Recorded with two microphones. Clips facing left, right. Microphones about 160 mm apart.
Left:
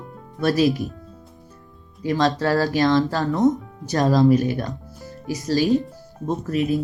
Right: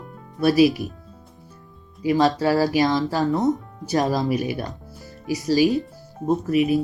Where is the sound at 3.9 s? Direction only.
15° right (ahead or behind).